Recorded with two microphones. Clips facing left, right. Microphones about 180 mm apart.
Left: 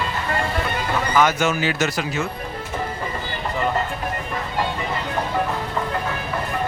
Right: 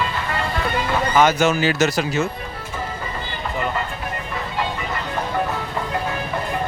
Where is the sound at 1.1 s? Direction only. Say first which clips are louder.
Right 3 dB; 30° right (ahead or behind).